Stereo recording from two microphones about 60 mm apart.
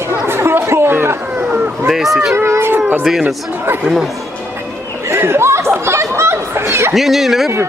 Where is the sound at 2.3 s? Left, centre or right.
Right.